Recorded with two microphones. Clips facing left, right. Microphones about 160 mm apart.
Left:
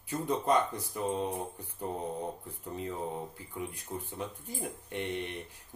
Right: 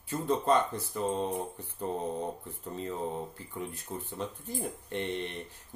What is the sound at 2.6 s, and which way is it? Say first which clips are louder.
Speech: right 1 dB; 10° left (ahead or behind).